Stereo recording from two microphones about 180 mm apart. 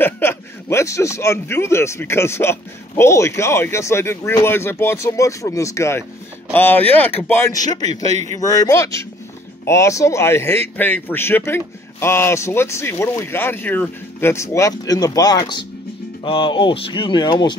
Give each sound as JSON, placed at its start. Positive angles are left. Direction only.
{"t": 0.0, "sound": "a man's voice", "side_deg": 10}